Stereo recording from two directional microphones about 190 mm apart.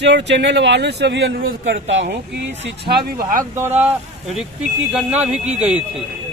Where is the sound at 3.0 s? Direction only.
50° right (ahead or behind).